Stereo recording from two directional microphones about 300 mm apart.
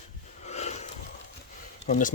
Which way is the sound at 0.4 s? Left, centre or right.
Left.